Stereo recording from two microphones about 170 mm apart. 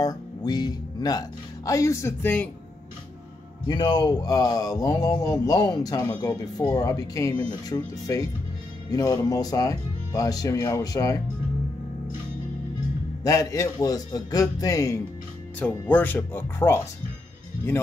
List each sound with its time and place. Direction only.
0.0 s speech: 20° left (ahead or behind)
3.6 s speech: 25° left (ahead or behind)
13.2 s speech: 20° left (ahead or behind)